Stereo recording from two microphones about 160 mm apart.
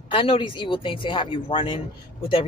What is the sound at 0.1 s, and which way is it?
A man's voice, 35° left (ahead or behind).